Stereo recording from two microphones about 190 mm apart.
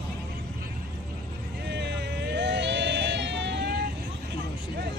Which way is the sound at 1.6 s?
65° right (ahead or behind).